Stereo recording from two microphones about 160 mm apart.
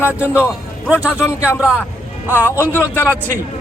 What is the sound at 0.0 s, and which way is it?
Speech, 10° right (ahead or behind).